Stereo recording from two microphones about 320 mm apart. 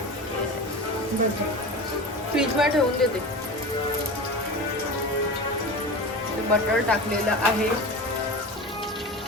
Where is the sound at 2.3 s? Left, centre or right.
Centre.